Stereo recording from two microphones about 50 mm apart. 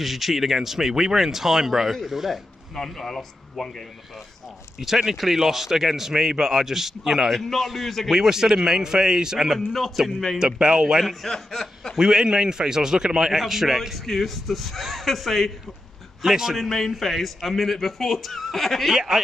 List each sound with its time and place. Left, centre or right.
0.0 s a man's voice: centre
2.7 s speech: centre
4.7 s speech: centre
9.7 s a man's voice: centre
10.4 s speech: centre
11.0 s a man's voice: centre
12.0 s a man's voice: centre
16.2 s speech: centre
16.5 s a man's voice: centre
18.9 s speech: centre